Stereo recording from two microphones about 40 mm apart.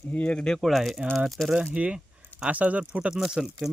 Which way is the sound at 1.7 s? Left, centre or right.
Right.